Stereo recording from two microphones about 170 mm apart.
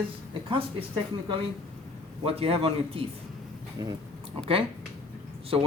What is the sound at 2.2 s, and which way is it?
Speech, 35° right (ahead or behind).